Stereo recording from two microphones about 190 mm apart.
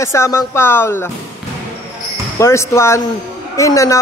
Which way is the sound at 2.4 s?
15° left (ahead or behind).